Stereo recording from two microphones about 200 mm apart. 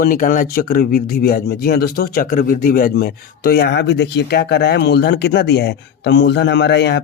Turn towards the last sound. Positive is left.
turn(degrees=60)  # may be behind; listen again after turning